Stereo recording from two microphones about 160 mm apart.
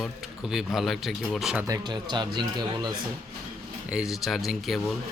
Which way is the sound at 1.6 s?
25° right (ahead or behind).